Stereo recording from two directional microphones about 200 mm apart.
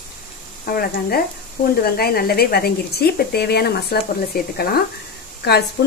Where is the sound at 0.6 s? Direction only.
50° left (ahead or behind).